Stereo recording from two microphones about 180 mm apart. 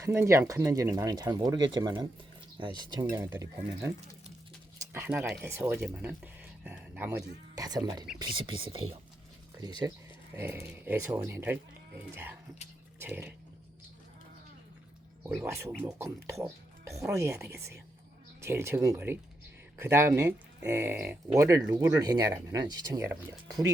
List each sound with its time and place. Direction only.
0.0 s speech: 15° right (ahead or behind)
7.5 s speech: 20° right (ahead or behind)
15.4 s speech: 15° right (ahead or behind)
21.9 s speech: 20° right (ahead or behind)